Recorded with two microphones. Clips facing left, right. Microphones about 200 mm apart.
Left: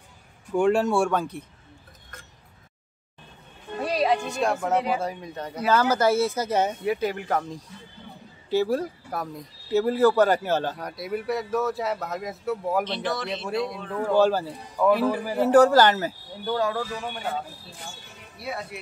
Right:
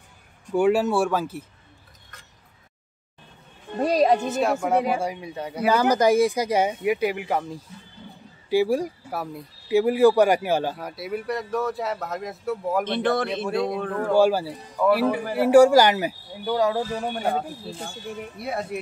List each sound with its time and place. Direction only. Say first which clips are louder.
0.5 s speech: right 1 dB; 5° right (ahead or behind)
3.8 s music: right 4 dB; 40° right (ahead or behind)
4.3 s speech: right 2 dB; 5° right (ahead or behind)
12.8 s a man's voice: right 6 dB; 55° right (ahead or behind)
14.0 s speech: right 1 dB; 10° right (ahead or behind)
16.9 s speech: right 5 dB; 40° right (ahead or behind)